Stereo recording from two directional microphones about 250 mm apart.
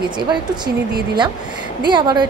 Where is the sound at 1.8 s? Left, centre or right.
Centre.